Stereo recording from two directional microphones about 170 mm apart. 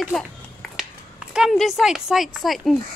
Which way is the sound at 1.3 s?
Centre (ahead or behind).